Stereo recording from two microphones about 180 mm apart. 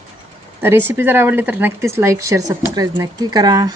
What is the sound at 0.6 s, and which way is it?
Speech, 10° right (ahead or behind).